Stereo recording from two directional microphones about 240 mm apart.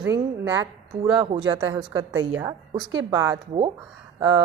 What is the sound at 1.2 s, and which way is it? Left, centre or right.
A woman's voice, right.